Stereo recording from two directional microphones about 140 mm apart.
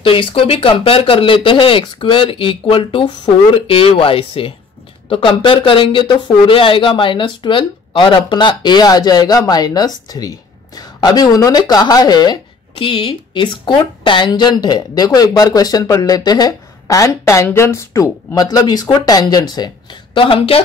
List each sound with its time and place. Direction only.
0.0 s speech: 40° left (ahead or behind)